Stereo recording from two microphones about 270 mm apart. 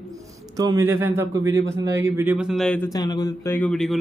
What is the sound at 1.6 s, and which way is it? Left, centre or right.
Speech, right.